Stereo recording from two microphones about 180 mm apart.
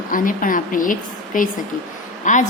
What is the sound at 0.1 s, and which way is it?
A woman's voice, 50° left (ahead or behind).